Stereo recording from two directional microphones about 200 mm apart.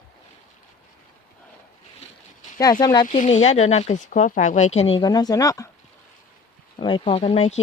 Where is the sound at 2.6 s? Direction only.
20° left (ahead or behind).